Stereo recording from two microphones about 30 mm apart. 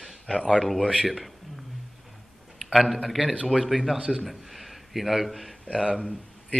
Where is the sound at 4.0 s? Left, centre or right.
Right.